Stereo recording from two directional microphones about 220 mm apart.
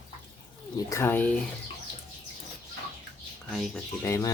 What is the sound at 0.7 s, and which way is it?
Speech, 15° left (ahead or behind).